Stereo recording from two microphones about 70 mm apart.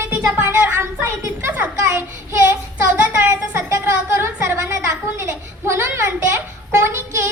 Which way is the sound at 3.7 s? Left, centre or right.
Right.